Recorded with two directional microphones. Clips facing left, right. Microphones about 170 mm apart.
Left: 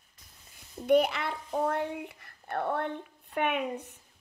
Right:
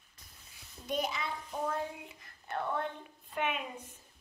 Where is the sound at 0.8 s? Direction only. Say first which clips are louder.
Left 11 dB; 65° left (ahead or behind).